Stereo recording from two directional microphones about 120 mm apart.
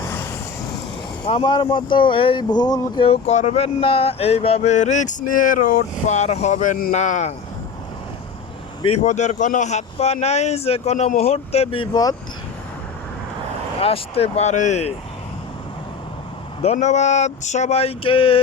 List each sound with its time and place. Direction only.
0.1 s vehicle: 20° left (ahead or behind)
1.3 s speech: 40° left (ahead or behind)
3.0 s a man's voice: 55° left (ahead or behind)
3.3 s speech: 75° left (ahead or behind); by 5.6 s 90° left
6.1 s speech: 70° left (ahead or behind)
9.0 s a man's voice: 85° left; by 11.9 s 55° left (ahead or behind)
13.7 s a man's voice: 55° left (ahead or behind)
16.6 s speech: 65° left (ahead or behind); by 18.3 s 50° left (ahead or behind)